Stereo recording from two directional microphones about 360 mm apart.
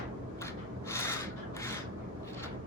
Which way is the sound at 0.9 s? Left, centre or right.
Centre.